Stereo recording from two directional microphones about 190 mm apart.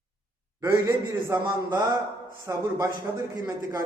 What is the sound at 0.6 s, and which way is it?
A man's voice, 15° right (ahead or behind).